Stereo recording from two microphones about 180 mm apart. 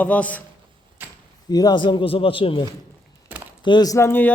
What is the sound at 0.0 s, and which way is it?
Speech, 10° left (ahead or behind).